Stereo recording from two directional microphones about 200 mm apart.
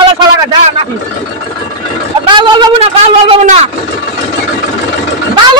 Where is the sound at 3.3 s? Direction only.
35° right (ahead or behind).